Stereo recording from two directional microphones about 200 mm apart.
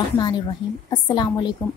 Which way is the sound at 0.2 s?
20° left (ahead or behind).